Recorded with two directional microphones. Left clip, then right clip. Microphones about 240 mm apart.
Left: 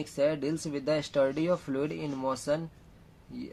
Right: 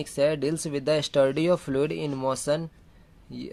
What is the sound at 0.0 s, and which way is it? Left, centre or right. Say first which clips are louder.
Speech: right 4 dB; right.